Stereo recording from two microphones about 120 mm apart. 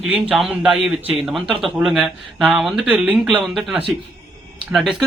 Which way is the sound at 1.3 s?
Centre (ahead or behind).